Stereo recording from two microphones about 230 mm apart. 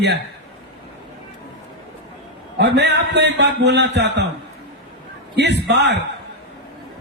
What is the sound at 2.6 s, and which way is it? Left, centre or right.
A man's voice, right.